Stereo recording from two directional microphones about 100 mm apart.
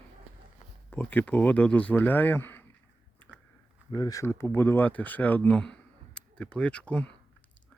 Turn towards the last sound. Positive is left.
turn(degrees=10)  # may be behind; listen again after turning